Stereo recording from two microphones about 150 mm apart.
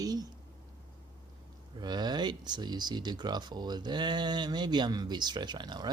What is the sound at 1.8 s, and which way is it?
Speech, 30° right (ahead or behind).